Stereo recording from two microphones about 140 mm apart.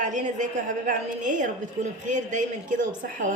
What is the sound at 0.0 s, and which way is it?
A woman's voice, 60° right (ahead or behind).